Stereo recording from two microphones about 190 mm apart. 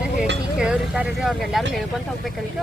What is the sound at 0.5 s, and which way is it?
Speech, 5° right (ahead or behind).